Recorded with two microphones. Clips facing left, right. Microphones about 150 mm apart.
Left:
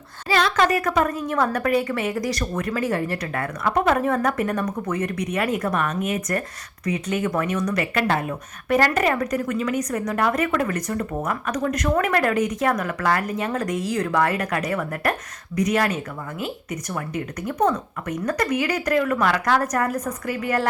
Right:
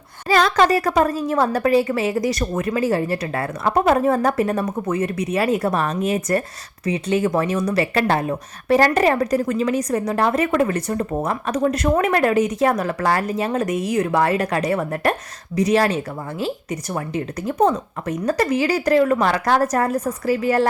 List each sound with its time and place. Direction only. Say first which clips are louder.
0.3 s a woman's voice: right 4 dB; 45° right (ahead or behind)